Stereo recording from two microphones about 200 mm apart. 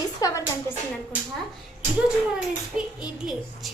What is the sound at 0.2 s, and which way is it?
Speech, 15° left (ahead or behind).